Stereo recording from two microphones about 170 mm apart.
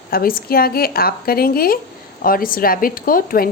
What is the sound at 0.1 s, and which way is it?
A woman's voice, 60° left (ahead or behind).